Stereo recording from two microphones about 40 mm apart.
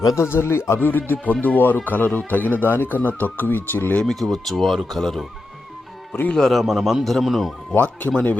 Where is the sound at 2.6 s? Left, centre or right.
Left.